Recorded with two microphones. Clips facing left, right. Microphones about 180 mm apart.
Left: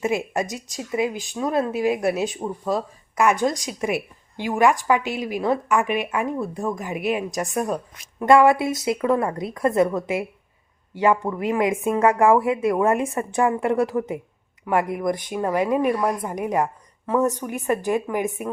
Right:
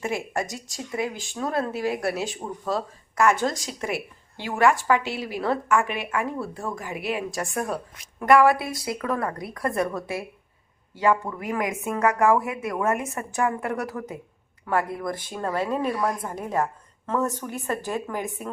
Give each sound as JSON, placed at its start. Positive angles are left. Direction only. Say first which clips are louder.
{"t": 0.0, "sound": "a woman's voice", "louder": "left 4 dB", "side_deg": 20}